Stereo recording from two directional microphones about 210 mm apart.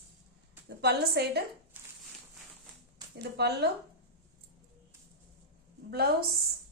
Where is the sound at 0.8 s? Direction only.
50° right (ahead or behind).